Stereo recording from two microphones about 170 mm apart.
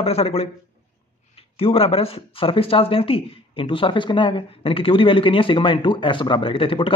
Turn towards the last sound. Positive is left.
turn(degrees=30)  # may be behind; listen again after turning